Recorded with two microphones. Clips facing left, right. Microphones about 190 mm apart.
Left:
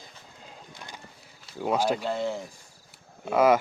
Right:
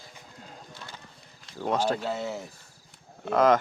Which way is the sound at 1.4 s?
5° left (ahead or behind).